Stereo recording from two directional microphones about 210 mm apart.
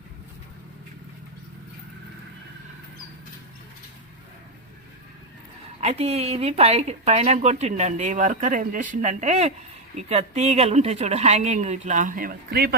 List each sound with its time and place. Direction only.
5.8 s speech: 30° right (ahead or behind); by 12.7 s 45° right (ahead or behind)